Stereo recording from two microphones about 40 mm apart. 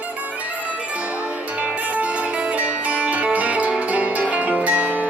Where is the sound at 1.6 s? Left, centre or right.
Right.